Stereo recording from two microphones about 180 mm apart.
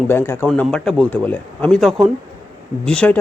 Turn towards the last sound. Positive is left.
turn(degrees=5)  # may be behind; listen again after turning